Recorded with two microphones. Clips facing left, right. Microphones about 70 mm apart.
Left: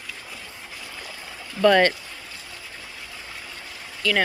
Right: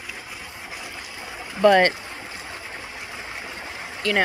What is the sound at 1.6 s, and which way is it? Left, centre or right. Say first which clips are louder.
Speech: right 1 dB; right.